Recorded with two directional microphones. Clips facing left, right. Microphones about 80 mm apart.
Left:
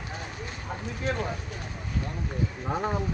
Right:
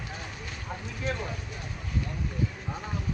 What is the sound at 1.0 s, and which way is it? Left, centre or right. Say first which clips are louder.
Speech: left 3 dB; left.